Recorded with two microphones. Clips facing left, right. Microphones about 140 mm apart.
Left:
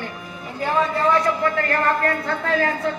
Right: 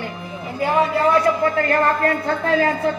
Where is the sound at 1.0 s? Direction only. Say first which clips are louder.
Right 3 dB; 30° right (ahead or behind).